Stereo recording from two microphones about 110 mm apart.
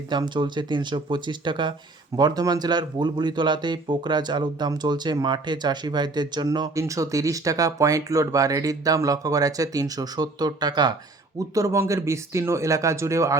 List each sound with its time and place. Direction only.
0.1 s speech: 45° right (ahead or behind)
6.7 s speech: 30° right (ahead or behind)